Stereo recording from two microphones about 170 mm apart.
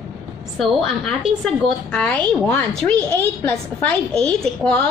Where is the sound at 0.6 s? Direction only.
Centre (ahead or behind).